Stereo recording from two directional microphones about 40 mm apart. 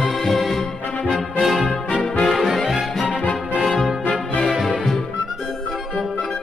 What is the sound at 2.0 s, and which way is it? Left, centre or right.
Brass instrument, centre.